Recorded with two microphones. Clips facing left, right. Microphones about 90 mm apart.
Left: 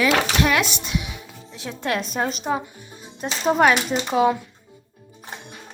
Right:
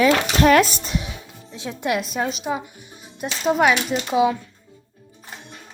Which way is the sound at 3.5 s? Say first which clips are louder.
Left 1 dB; centre (ahead or behind).